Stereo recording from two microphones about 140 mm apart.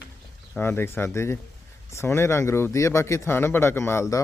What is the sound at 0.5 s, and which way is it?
Speech, 15° left (ahead or behind).